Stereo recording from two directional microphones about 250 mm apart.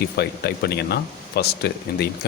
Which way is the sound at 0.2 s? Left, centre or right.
Left.